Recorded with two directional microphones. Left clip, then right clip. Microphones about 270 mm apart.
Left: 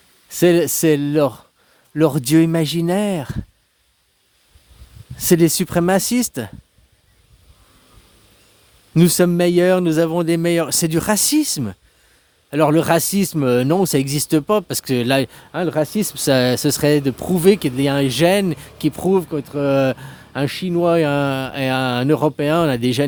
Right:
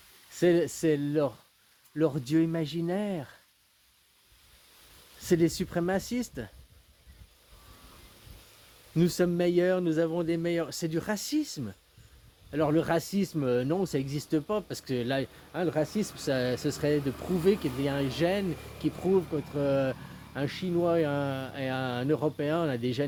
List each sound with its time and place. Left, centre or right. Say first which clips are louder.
0.3 s speech: left 10 dB; left
5.2 s speech: left 11 dB; left
9.0 s speech: left 11 dB; left